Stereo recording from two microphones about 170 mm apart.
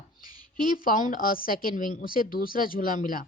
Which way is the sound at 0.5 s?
55° left (ahead or behind).